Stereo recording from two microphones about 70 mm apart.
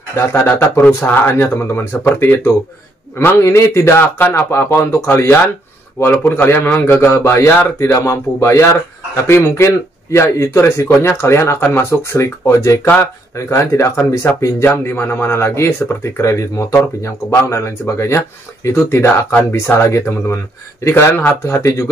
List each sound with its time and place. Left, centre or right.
0.2 s speech: left
0.5 s speech: left
14.6 s speech: left